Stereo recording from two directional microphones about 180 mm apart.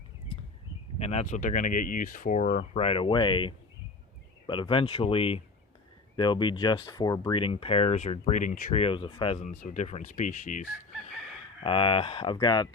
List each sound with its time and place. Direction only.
0.9 s speech: 35° left (ahead or behind)
9.4 s chicken: 45° left (ahead or behind)
11.6 s speech: 30° left (ahead or behind)